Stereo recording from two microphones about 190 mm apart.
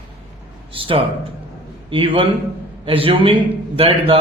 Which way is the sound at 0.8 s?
30° right (ahead or behind).